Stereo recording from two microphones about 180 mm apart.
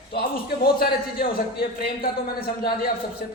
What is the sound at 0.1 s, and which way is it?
Speech, 60° left (ahead or behind).